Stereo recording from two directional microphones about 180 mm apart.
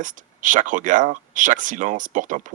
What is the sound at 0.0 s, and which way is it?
Speech, 45° right (ahead or behind).